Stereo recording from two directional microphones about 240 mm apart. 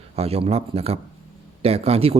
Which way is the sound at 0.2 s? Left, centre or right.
Right.